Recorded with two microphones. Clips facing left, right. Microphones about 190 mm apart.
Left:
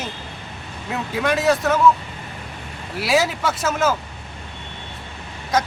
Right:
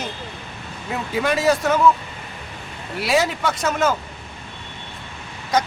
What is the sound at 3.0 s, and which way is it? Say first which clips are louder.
Speech: even; centre (ahead or behind).